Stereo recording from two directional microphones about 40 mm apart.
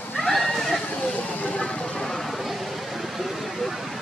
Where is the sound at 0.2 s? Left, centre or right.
Centre.